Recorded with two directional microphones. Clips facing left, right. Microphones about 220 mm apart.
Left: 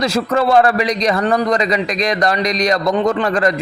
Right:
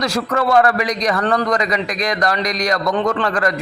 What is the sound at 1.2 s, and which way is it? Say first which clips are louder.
Speech: left 1 dB; 10° left (ahead or behind).